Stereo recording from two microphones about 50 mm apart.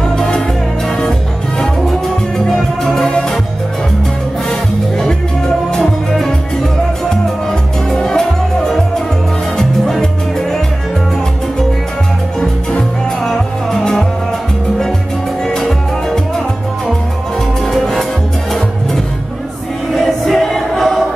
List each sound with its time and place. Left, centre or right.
1.6 s music: centre
4.5 s music: centre
7.9 s music: centre
13.2 s music: centre
15.4 s music: centre
17.6 s music: centre
19.9 s music: centre